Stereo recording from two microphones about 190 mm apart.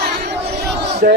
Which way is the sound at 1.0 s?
55° right (ahead or behind).